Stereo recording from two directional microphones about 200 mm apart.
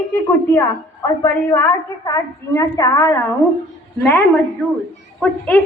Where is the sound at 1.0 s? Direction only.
10° left (ahead or behind).